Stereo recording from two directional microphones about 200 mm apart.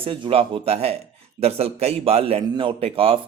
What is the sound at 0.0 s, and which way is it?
A man's voice, 25° right (ahead or behind).